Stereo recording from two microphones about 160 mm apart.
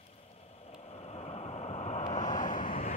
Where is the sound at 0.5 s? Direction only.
40° left (ahead or behind).